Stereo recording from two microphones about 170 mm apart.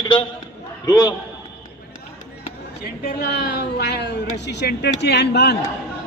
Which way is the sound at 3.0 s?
70° left (ahead or behind).